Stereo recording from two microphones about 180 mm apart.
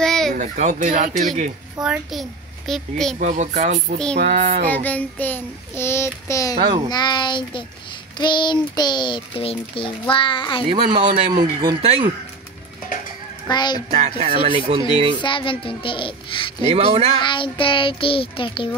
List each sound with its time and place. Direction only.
0.0 s a sound: centre (ahead or behind)
0.3 s speech: 45° right (ahead or behind)
1.8 s a child's voice: centre (ahead or behind)
3.2 s speech: 40° right (ahead or behind)
4.6 s child singing: 10° left (ahead or behind)
6.5 s speech: 25° right (ahead or behind)
6.9 s a child's voice: 25° left (ahead or behind)
11.1 s speech: 25° right (ahead or behind)
13.5 s a child's voice: 25° left (ahead or behind)
13.9 s speech: 40° right (ahead or behind)
14.5 s speech: 25° right (ahead or behind)
15.2 s a child's voice: 30° left (ahead or behind)
16.7 s speech: 35° right (ahead or behind)
17.2 s a child's voice: 25° left (ahead or behind)